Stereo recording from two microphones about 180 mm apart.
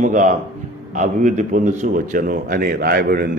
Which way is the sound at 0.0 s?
45° right (ahead or behind).